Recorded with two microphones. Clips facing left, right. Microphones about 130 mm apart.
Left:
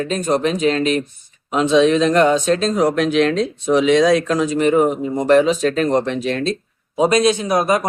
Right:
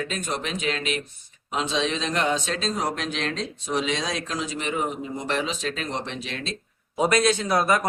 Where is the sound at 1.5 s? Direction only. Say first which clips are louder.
Left 12 dB; 55° left (ahead or behind).